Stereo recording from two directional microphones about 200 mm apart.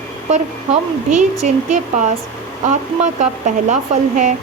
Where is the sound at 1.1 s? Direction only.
40° right (ahead or behind).